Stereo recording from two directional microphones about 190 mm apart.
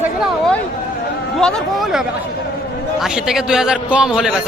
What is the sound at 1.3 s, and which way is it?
A man's voice, 5° left (ahead or behind).